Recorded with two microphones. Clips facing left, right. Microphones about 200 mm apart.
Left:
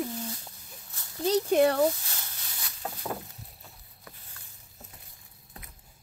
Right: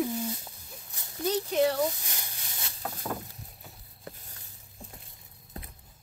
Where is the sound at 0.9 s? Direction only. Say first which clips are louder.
Right 1 dB; 15° right (ahead or behind).